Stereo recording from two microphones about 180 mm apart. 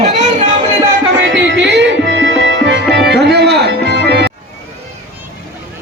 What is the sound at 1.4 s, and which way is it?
Music, 85° right.